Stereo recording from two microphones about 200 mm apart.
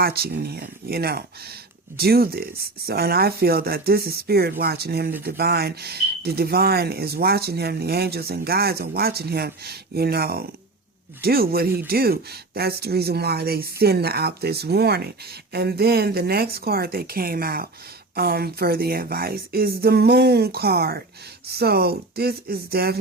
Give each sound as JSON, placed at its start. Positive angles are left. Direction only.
{"t": 0.0, "sound": "speech", "side_deg": -50}